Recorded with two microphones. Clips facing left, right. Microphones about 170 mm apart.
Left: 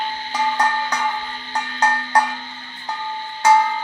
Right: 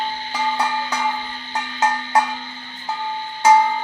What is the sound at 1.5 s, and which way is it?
Cowbell, centre (ahead or behind).